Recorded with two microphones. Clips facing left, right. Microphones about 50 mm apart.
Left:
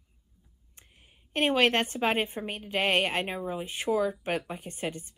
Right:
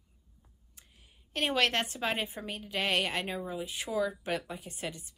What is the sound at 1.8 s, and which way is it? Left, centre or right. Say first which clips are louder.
A woman's voice: left 6 dB; left.